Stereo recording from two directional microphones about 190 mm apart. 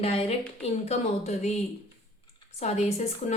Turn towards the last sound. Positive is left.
turn(degrees=35)  # may be behind; listen again after turning